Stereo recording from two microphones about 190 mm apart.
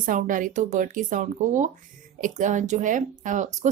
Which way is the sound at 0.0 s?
45° right (ahead or behind).